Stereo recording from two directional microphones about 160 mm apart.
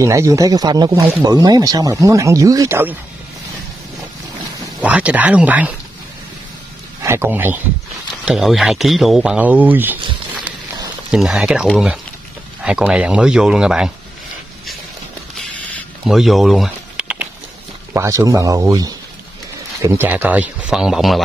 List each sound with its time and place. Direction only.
0.0 s speech: 20° right (ahead or behind)
4.8 s speech: 10° right (ahead or behind)
7.0 s a man's voice: 15° right (ahead or behind)
11.1 s speech: 5° right (ahead or behind)
15.3 s a sound: centre (ahead or behind)
17.9 s speech: 20° right (ahead or behind); by 21.2 s centre (ahead or behind)